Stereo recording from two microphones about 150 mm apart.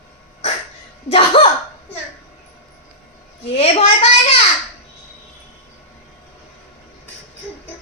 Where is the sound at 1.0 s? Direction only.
40° left (ahead or behind).